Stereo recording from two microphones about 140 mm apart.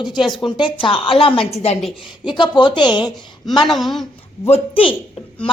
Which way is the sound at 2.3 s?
35° left (ahead or behind).